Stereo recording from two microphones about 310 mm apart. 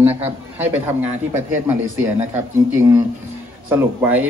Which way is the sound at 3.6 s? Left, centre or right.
Centre.